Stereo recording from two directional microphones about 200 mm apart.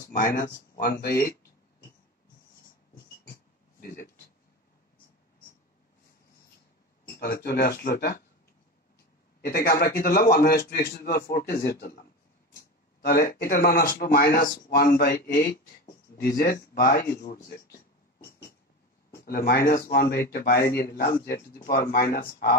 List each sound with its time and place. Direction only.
0.1 s speech: 45° left (ahead or behind)
3.8 s speech: 50° left (ahead or behind)
7.2 s speech: 50° left (ahead or behind)
9.4 s speech: 50° left (ahead or behind)
13.0 s speech: 50° left (ahead or behind)
19.1 s speech: 50° left (ahead or behind)